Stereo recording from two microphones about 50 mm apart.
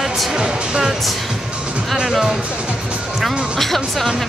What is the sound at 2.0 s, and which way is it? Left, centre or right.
Speech, centre.